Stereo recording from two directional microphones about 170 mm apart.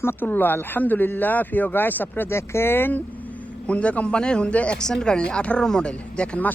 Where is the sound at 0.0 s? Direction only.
10° left (ahead or behind).